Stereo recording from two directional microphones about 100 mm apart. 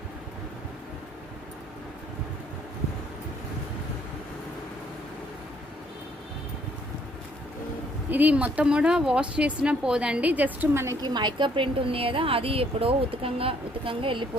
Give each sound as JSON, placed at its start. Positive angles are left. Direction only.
{"t": 8.1, "sound": "speech", "side_deg": -15}
{"t": 11.0, "sound": "speech", "side_deg": -45}